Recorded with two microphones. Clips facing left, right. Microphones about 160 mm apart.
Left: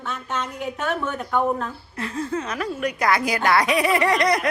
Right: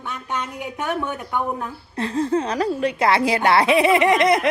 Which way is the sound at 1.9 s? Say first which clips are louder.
Right 7 dB; 35° right (ahead or behind).